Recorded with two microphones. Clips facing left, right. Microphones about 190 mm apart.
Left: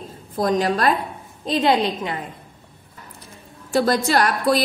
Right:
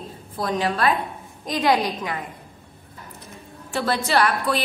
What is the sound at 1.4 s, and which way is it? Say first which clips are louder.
Speech: left 2 dB; 25° left (ahead or behind).